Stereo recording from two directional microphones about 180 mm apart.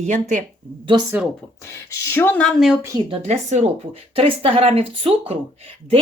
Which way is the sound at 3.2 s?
40° right (ahead or behind).